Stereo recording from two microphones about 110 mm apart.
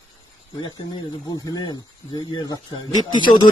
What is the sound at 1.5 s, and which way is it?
Speech, 40° left (ahead or behind).